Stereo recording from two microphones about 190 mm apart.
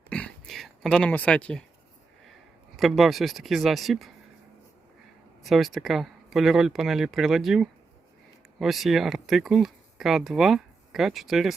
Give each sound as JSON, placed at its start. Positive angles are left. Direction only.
{"t": 0.1, "sound": "a sound", "side_deg": 5}
{"t": 2.7, "sound": "speech", "side_deg": 0}
{"t": 5.4, "sound": "speech", "side_deg": 0}